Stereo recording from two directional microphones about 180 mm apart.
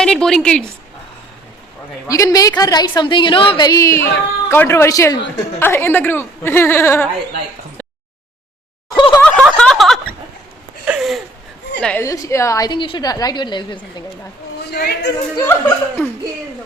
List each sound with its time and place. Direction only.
0.0 s a woman's voice: 5° left (ahead or behind)
2.0 s a woman's voice: 20° left (ahead or behind)
9.0 s snicker: 25° left (ahead or behind)
9.2 s snicker: 5° left (ahead or behind)
10.8 s a sound: 5° right (ahead or behind)
11.8 s a woman's voice: 10° left (ahead or behind); by 13.7 s 25° left (ahead or behind)
14.7 s speech: 60° left (ahead or behind)
15.4 s speech: 10° left (ahead or behind)